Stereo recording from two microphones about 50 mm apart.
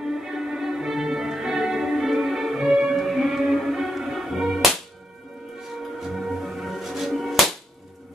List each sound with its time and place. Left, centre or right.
0.1 s music: centre
5.9 s music: centre